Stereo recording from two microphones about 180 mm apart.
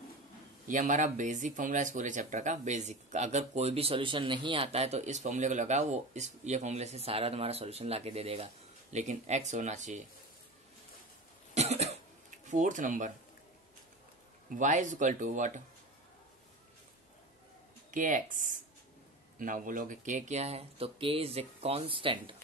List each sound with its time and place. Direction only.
0.7 s speech: 45° right (ahead or behind)
11.5 s cough: 35° right (ahead or behind)
12.4 s speech: 45° right (ahead or behind)
14.5 s speech: 45° right (ahead or behind)
17.9 s speech: 45° right (ahead or behind); by 22.3 s 30° right (ahead or behind)